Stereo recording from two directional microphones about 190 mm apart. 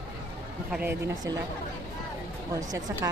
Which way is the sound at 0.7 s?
10° right (ahead or behind).